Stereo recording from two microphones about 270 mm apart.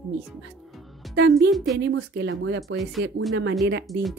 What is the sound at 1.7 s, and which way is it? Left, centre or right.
Speech, right.